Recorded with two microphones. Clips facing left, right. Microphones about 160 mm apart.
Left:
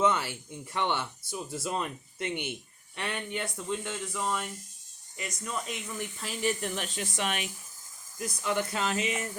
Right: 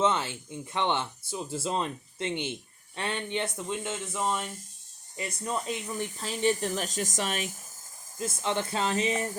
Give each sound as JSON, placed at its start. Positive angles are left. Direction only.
{"t": 0.0, "sound": "speech", "side_deg": -25}
{"t": 8.2, "sound": "speech", "side_deg": -25}